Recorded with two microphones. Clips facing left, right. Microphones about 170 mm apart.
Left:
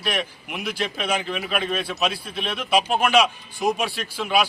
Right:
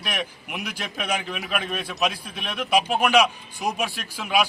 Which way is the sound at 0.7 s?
10° right (ahead or behind).